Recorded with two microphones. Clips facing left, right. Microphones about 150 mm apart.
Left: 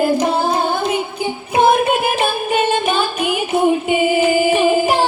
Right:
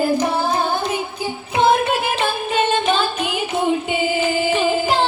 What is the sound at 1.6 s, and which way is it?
Music, 15° left (ahead or behind).